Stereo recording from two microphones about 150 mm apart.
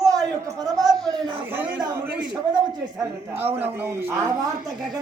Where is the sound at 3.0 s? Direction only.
15° right (ahead or behind).